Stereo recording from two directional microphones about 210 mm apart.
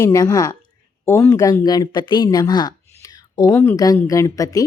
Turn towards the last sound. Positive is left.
turn(degrees=15)  # may be behind; listen again after turning